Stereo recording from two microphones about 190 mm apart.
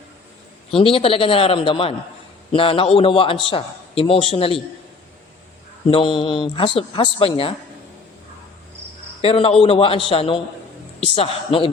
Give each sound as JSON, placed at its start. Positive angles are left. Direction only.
{"t": 0.7, "sound": "a man's voice", "side_deg": 30}
{"t": 5.9, "sound": "a man's voice", "side_deg": 25}
{"t": 9.2, "sound": "a man's voice", "side_deg": 30}